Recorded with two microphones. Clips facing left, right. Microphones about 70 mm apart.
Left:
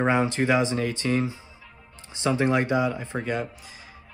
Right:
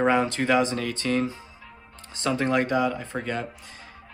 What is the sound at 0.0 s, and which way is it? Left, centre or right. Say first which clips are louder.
Speech: even; centre.